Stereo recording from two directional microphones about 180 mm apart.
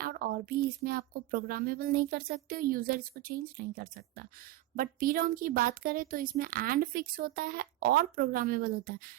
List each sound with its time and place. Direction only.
0.0 s speech: 55° right (ahead or behind)